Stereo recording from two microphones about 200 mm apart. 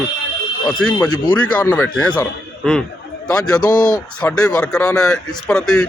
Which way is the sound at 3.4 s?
20° left (ahead or behind).